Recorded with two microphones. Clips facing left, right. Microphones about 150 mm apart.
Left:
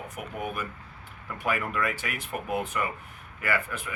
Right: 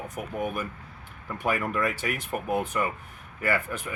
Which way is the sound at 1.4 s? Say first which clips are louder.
Right 2 dB; 30° right (ahead or behind).